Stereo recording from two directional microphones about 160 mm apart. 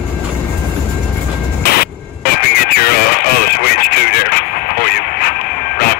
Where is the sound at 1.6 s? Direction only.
75° left (ahead or behind).